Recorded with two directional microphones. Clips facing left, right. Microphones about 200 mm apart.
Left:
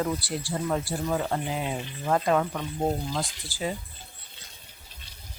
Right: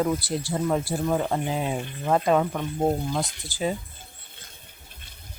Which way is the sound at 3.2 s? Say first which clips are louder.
Right 3 dB; 20° right (ahead or behind).